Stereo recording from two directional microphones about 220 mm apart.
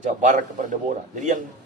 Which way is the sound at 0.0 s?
35° right (ahead or behind).